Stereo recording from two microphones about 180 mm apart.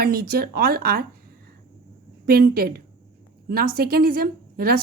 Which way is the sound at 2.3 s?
55° right (ahead or behind).